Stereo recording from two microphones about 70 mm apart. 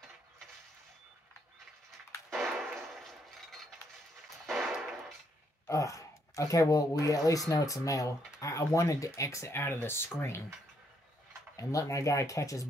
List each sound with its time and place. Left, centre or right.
2.3 s music: centre
4.5 s a sound: centre
5.7 s speech: left
11.5 s speech: left